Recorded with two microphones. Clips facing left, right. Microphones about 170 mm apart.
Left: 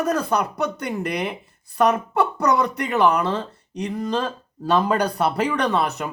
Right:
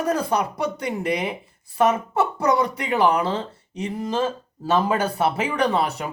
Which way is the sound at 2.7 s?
10° right (ahead or behind).